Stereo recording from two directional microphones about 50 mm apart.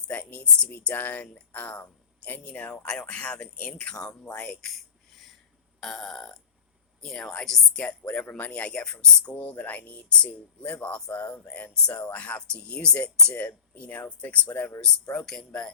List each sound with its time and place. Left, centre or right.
0.1 s a sound: left
0.9 s speech: left
2.4 s speech: centre
4.6 s a sound: centre
5.8 s burping: centre
7.0 s speech: centre
7.8 s speech: left
14.4 s speech: left
14.8 s speech: centre